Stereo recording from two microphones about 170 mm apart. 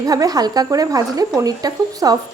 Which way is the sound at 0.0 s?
20° right (ahead or behind).